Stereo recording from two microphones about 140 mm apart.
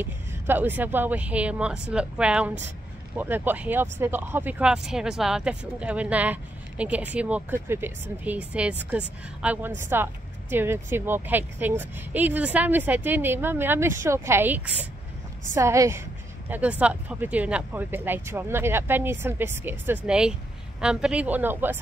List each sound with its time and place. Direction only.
0.0 s a woman's voice: 15° right (ahead or behind)